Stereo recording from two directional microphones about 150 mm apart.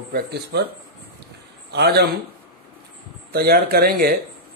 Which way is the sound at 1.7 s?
90° right.